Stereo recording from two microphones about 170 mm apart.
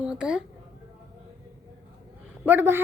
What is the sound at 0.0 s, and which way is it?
Speech, 5° right (ahead or behind).